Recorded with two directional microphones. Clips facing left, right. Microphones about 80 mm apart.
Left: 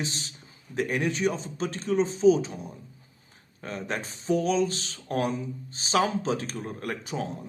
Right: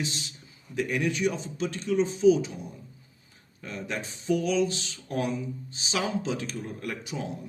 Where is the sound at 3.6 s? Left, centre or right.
Left.